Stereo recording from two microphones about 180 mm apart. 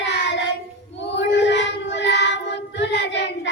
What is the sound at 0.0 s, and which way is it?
Child singing, 75° left (ahead or behind).